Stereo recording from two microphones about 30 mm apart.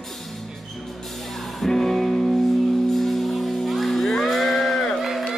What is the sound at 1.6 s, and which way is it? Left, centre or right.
Music, centre.